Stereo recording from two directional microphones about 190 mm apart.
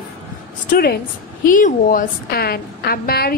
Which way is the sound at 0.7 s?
50° left (ahead or behind).